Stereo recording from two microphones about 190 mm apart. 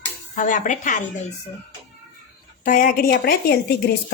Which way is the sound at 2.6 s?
45° left (ahead or behind).